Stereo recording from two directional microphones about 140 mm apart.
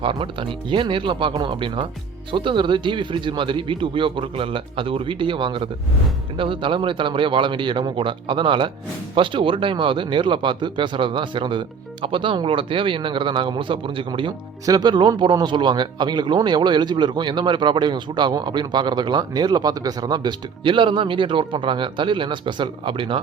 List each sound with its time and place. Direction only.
0.0 s a man's voice: 40° right (ahead or behind)